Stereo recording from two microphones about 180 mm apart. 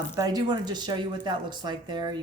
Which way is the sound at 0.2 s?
20° right (ahead or behind).